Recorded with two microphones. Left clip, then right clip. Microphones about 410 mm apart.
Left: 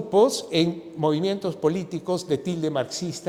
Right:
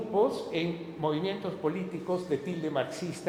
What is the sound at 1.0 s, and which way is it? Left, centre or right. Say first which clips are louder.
A man's voice: left 7 dB; left.